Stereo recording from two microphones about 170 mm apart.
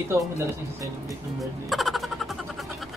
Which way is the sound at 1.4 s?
Centre (ahead or behind).